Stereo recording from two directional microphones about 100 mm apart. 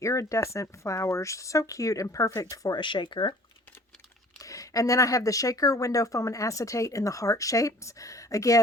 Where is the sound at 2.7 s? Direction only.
55° left (ahead or behind).